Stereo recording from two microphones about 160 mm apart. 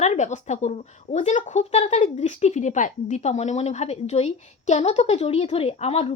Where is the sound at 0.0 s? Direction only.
45° left (ahead or behind).